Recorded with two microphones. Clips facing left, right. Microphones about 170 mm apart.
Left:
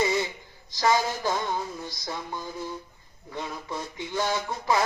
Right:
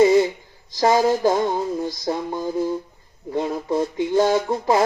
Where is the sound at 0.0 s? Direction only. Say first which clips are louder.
Right 11 dB; 40° right (ahead or behind).